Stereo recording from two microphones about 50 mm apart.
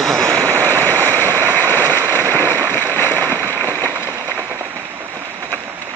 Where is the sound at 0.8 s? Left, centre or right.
Left.